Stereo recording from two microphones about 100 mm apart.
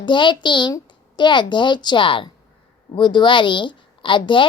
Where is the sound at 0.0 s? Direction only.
55° left (ahead or behind).